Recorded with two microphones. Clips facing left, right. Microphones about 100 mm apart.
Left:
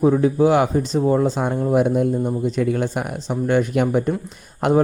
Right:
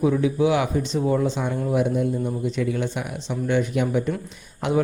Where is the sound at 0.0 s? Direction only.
40° left (ahead or behind).